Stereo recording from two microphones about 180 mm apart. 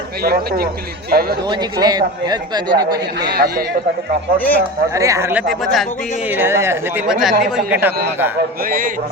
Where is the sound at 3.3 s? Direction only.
60° right (ahead or behind).